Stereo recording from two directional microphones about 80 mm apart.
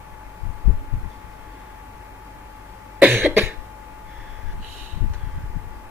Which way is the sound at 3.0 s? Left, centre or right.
Right.